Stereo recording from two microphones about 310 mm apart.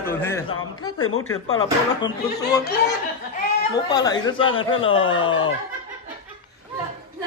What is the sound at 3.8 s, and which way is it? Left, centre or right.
A man's voice, centre.